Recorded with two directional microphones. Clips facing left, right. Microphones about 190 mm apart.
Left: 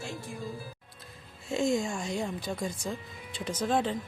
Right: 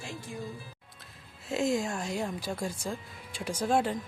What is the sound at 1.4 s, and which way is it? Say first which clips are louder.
Speech: left 1 dB; 5° right (ahead or behind).